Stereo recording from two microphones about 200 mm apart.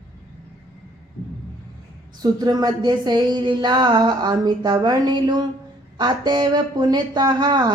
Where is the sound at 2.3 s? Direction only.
20° right (ahead or behind).